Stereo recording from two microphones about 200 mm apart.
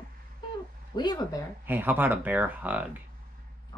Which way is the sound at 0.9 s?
20° left (ahead or behind).